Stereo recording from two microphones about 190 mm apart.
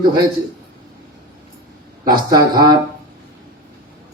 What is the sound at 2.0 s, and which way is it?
Speech, 20° right (ahead or behind).